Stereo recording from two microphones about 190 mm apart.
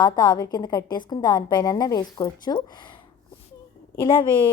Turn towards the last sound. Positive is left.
turn(degrees=25)  # may be behind; listen again after turning